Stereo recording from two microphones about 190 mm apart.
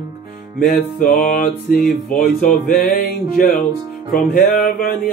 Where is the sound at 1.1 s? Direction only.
50° left (ahead or behind).